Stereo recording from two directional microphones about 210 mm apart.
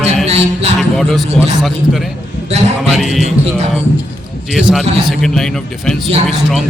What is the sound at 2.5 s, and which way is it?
Music, 30° right (ahead or behind).